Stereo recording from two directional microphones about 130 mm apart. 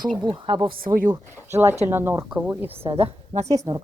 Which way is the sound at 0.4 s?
40° right (ahead or behind).